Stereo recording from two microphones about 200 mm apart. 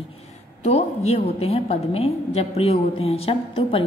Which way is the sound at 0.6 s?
35° left (ahead or behind).